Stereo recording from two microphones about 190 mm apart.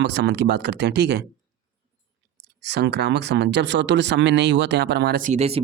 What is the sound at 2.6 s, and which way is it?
Speech, 60° right (ahead or behind).